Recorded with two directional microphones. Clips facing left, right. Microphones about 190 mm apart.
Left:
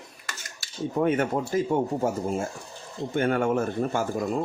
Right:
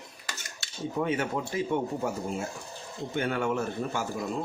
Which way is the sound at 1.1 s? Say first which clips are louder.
Left 5 dB; 45° left (ahead or behind).